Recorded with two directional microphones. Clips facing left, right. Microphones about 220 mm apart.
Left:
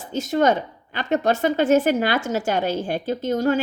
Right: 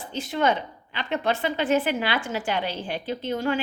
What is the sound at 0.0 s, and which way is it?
A woman's voice, 45° left (ahead or behind).